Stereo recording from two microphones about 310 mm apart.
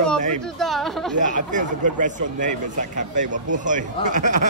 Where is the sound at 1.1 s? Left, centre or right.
Right.